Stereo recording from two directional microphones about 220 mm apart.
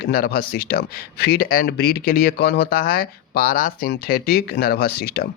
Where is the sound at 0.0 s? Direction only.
45° left (ahead or behind).